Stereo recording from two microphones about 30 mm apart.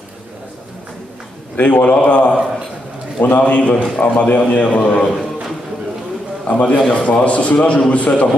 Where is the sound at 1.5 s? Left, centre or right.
Left.